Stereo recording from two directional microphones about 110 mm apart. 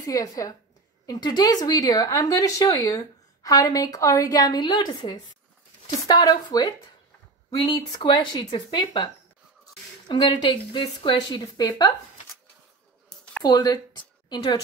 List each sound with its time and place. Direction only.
0.0 s a woman's voice: 30° left (ahead or behind)
13.4 s speech: 40° left (ahead or behind)